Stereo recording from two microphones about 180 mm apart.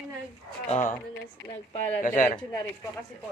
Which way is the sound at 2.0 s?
45° left (ahead or behind).